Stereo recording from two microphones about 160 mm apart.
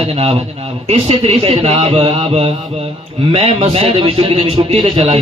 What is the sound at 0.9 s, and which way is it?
Speech, 40° right (ahead or behind).